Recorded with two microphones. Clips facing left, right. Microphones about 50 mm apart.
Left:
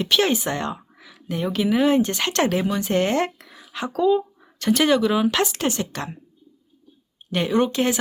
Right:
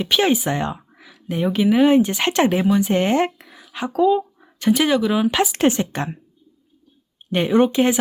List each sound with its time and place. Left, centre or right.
0.0 s speech: centre
3.9 s a sound: centre
4.6 s speech: centre
5.5 s a woman's voice: right
7.3 s speech: right